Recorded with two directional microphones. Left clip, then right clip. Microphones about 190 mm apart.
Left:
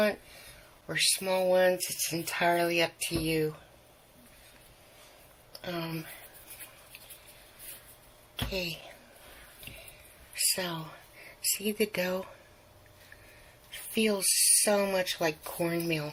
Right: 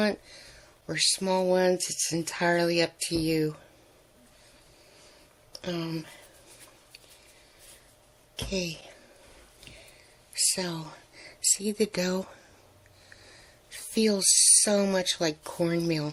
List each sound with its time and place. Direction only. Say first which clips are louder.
0.9 s speech: right 2 dB; 65° right (ahead or behind)
5.5 s speech: right 3 dB; 60° right (ahead or behind)
8.4 s speech: right 2 dB; 60° right (ahead or behind)
10.3 s speech: right 2 dB; 50° right (ahead or behind)
13.7 s speech: right 3 dB; 60° right (ahead or behind)